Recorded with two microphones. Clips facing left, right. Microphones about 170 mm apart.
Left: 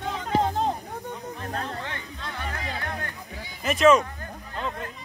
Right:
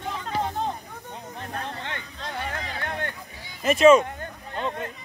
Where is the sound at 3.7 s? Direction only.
Centre (ahead or behind).